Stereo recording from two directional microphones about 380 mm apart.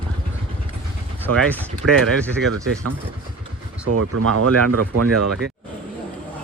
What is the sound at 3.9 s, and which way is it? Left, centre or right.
Speech, right.